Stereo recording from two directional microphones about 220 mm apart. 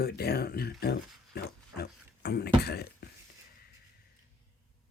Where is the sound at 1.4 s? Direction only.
45° left (ahead or behind).